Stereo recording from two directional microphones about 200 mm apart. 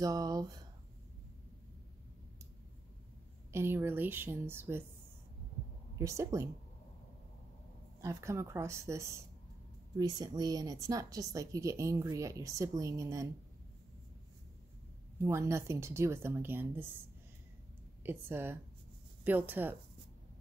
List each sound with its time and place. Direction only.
0.0 s speech: 20° right (ahead or behind)
3.5 s speech: 10° right (ahead or behind)
5.9 s speech: 15° right (ahead or behind)
8.0 s speech: 15° right (ahead or behind)
15.2 s speech: 15° right (ahead or behind)
18.0 s speech: 10° right (ahead or behind)